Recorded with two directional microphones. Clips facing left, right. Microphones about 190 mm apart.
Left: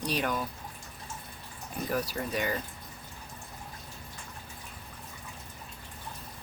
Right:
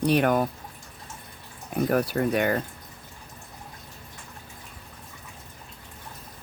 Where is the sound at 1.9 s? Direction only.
60° right (ahead or behind).